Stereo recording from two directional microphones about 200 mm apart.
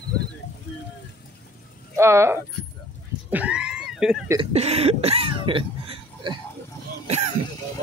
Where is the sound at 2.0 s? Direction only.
15° right (ahead or behind).